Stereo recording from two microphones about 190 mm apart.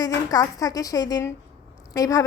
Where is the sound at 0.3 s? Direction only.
20° left (ahead or behind).